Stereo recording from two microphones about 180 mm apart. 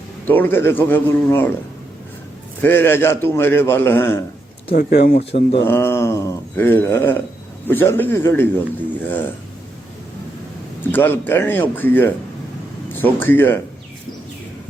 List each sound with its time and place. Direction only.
0.3 s a man's voice: 10° left (ahead or behind)
2.6 s a man's voice: 10° left (ahead or behind)
4.7 s speech: 55° left (ahead or behind)
5.6 s a man's voice: 15° left (ahead or behind)
10.9 s a man's voice: 10° left (ahead or behind)